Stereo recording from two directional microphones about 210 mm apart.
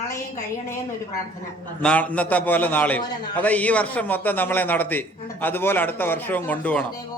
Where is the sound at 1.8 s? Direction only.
5° left (ahead or behind).